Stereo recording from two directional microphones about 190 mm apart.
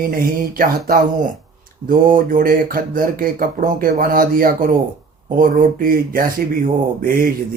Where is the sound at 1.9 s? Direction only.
45° right (ahead or behind).